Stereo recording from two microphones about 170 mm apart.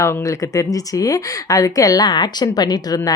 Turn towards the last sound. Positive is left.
turn(degrees=20)  # may be behind; listen again after turning